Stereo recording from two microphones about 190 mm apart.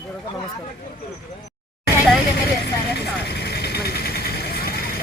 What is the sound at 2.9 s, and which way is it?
Vehicle, 60° left (ahead or behind).